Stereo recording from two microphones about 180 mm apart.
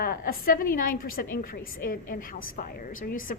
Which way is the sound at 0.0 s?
55° left (ahead or behind).